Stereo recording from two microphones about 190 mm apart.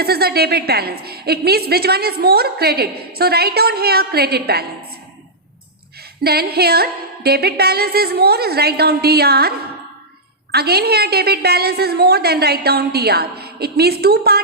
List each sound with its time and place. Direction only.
0.0 s a woman's voice: 55° right (ahead or behind)
6.2 s a woman's voice: 55° right (ahead or behind)